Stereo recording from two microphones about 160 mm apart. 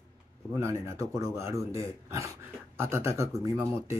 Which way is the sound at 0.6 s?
15° right (ahead or behind).